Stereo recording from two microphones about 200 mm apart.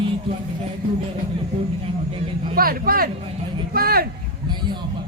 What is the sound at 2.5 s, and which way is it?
Speech, 45° right (ahead or behind).